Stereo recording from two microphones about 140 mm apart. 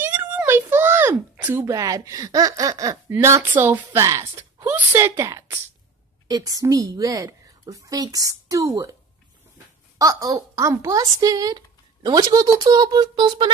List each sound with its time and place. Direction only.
0.0 s a child's voice: 15° right (ahead or behind)
9.9 s speech: 25° right (ahead or behind)